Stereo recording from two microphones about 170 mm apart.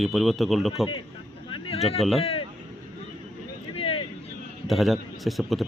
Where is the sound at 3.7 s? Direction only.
30° left (ahead or behind).